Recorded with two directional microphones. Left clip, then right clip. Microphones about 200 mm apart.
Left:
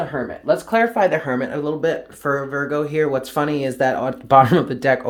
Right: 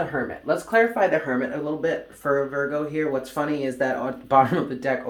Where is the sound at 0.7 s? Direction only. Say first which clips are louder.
Left 1 dB; 55° left (ahead or behind).